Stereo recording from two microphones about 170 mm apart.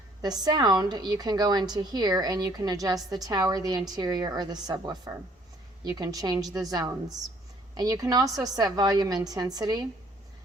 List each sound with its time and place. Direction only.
0.2 s a woman's voice: 25° right (ahead or behind)